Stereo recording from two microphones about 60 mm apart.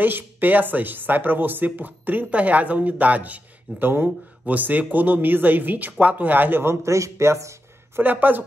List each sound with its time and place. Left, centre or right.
0.0 s speech: right
8.0 s speech: right